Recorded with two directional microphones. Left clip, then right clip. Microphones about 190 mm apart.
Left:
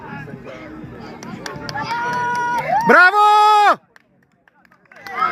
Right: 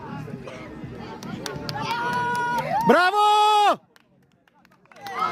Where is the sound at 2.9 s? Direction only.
Centre (ahead or behind).